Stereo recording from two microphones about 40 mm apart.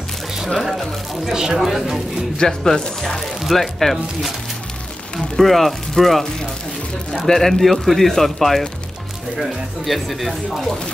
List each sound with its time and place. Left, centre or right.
1.2 s speech: centre
2.3 s speech: centre
3.2 s speech: centre
5.4 s speech: centre
7.2 s speech: centre